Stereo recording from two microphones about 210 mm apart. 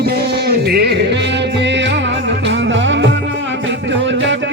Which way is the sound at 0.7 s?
50° right (ahead or behind).